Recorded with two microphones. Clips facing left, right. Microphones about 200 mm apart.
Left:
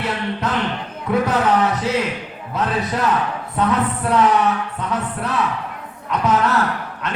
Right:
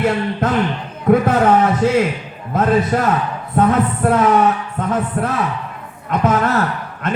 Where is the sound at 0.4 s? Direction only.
50° right (ahead or behind).